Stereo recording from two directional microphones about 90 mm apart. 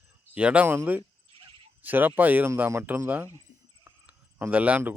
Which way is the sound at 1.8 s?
20° right (ahead or behind).